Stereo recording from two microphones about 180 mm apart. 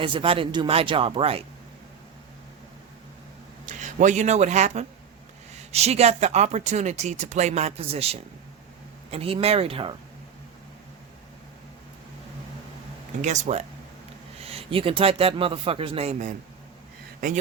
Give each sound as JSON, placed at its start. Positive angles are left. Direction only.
{"t": 0.0, "sound": "speech", "side_deg": -30}
{"t": 3.7, "sound": "speech", "side_deg": -40}
{"t": 13.2, "sound": "speech", "side_deg": -40}